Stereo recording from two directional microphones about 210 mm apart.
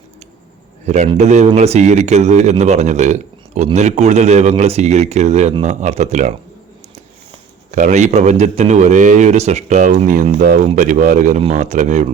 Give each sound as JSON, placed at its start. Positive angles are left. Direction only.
{"t": 0.9, "sound": "speech", "side_deg": -35}
{"t": 7.7, "sound": "speech", "side_deg": -35}